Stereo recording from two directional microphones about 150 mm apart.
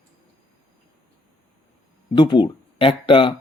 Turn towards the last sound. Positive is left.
turn(degrees=35)  # may be behind; listen again after turning